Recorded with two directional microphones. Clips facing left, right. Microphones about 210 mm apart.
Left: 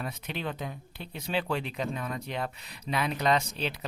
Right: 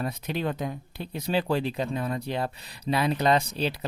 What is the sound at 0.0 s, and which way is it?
Speech, 40° right (ahead or behind).